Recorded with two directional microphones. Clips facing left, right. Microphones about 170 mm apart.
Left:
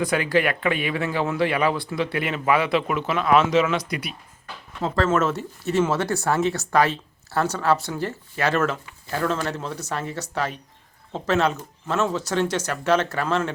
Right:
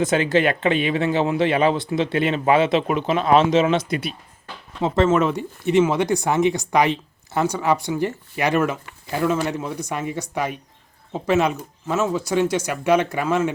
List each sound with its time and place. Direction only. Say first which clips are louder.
0.0 s speech: right 3 dB; 25° right (ahead or behind)
5.0 s speech: right 3 dB; 10° right (ahead or behind)